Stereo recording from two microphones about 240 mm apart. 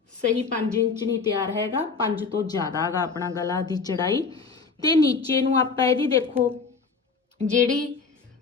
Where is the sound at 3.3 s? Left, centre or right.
Centre.